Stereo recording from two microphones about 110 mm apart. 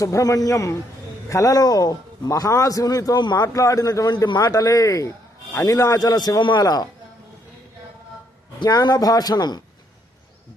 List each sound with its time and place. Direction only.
0.0 s a man's voice: 30° left (ahead or behind)
8.5 s a man's voice: 40° left (ahead or behind)